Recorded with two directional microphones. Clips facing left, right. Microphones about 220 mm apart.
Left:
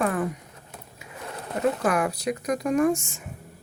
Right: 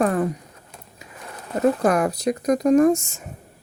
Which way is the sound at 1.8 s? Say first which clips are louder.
Right 5 dB; 40° right (ahead or behind).